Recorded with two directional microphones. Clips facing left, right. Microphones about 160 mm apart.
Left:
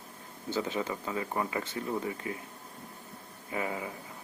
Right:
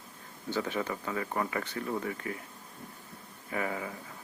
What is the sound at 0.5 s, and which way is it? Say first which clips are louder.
Speech: even; 20° left (ahead or behind).